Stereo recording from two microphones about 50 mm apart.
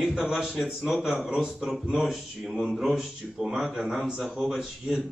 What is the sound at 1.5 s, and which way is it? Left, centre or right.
A man's voice, centre.